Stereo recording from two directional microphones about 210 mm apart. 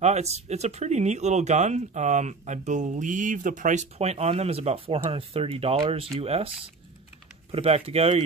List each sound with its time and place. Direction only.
0.0 s speech: 30° right (ahead or behind)